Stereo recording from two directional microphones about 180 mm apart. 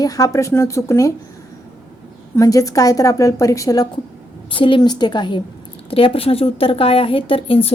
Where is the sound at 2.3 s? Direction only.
20° left (ahead or behind).